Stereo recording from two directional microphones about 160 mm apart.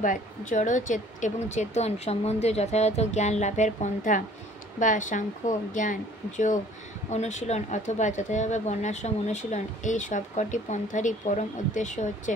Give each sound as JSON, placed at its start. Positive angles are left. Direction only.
{"t": 0.0, "sound": "speech", "side_deg": 55}